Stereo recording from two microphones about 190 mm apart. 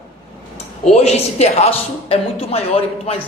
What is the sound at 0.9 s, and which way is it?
Speech, 35° left (ahead or behind).